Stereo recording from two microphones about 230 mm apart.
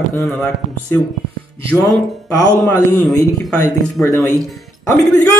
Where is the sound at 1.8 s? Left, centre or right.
Centre.